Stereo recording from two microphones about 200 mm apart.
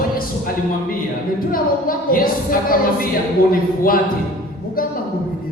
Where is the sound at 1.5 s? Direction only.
45° left (ahead or behind).